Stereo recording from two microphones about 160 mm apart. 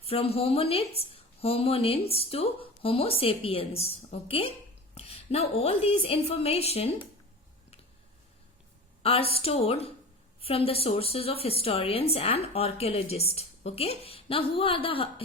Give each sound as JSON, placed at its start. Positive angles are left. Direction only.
{"t": 0.0, "sound": "a woman's voice", "side_deg": 35}
{"t": 9.0, "sound": "a woman's voice", "side_deg": 35}